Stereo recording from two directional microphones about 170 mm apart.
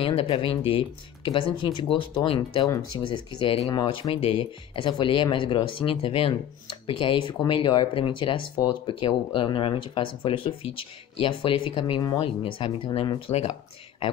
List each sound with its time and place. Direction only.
0.0 s speech: 30° left (ahead or behind)